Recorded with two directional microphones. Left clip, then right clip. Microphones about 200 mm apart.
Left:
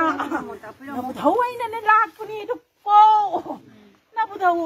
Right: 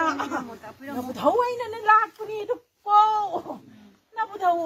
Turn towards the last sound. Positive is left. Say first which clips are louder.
# left 3 dB
turn(degrees=-15)  # may be behind; listen again after turning